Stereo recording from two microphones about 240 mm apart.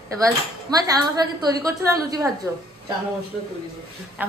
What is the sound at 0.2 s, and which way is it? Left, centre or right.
Speech, centre.